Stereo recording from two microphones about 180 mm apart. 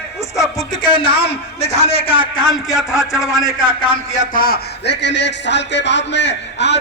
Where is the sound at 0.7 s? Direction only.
25° left (ahead or behind).